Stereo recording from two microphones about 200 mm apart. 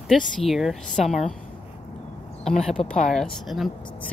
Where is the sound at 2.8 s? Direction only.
30° left (ahead or behind).